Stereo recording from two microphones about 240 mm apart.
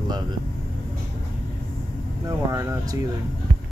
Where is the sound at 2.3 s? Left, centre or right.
Centre.